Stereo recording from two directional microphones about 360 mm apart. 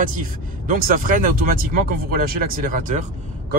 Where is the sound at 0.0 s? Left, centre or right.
Right.